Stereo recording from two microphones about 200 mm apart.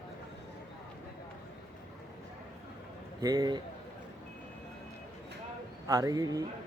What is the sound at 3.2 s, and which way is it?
Speech, 20° right (ahead or behind).